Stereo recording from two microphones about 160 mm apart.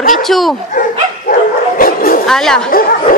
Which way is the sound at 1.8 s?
65° left (ahead or behind).